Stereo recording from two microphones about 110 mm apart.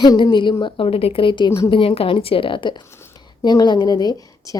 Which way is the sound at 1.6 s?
55° left (ahead or behind).